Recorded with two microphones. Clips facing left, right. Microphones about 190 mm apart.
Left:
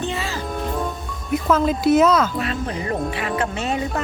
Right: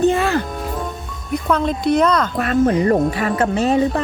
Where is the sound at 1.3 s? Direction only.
5° left (ahead or behind).